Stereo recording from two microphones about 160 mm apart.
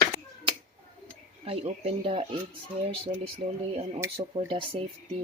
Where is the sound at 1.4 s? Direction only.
40° right (ahead or behind).